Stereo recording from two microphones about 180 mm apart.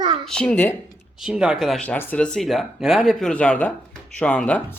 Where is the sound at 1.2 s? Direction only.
5° right (ahead or behind).